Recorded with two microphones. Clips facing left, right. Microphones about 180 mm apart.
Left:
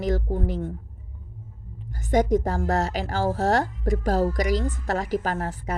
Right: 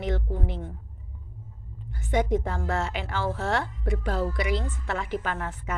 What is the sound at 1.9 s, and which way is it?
A woman's voice, 40° left (ahead or behind).